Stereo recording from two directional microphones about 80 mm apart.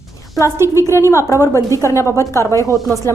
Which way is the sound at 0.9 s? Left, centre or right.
Left.